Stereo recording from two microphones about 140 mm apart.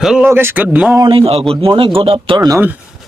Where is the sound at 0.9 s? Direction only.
40° right (ahead or behind).